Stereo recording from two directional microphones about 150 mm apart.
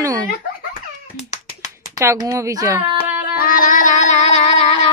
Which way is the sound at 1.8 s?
20° right (ahead or behind).